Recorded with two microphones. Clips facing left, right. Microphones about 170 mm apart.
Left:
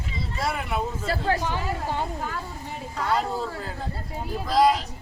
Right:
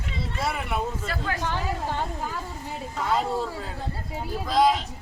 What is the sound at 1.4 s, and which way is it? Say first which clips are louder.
Speech: even; 10° left (ahead or behind).